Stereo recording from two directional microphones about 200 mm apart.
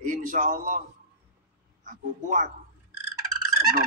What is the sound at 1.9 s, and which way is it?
Speech, 40° right (ahead or behind).